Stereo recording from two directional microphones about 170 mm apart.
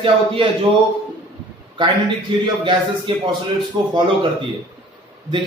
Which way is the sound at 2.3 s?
30° right (ahead or behind).